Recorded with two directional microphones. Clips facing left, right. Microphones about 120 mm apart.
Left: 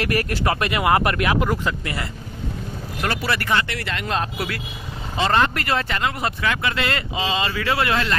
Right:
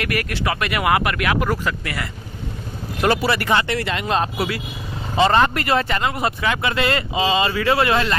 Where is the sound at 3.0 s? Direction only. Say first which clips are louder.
Right 6 dB; 20° right (ahead or behind).